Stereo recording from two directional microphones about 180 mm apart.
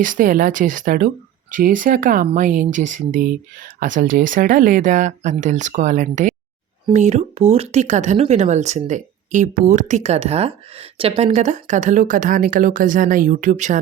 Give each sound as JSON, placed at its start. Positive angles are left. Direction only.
{"t": 0.0, "sound": "speech", "side_deg": -50}